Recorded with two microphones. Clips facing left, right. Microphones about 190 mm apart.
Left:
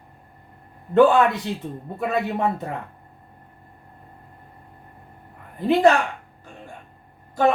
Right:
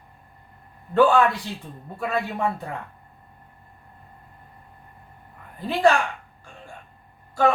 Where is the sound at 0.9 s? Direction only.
20° left (ahead or behind).